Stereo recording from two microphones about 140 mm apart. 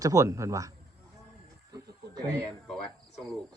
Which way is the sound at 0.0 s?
25° right (ahead or behind).